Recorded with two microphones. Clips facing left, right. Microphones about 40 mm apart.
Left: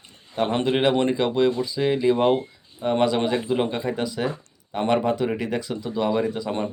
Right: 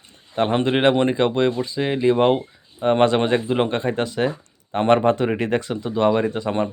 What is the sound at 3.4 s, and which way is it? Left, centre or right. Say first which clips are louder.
Speech: right 3 dB; right.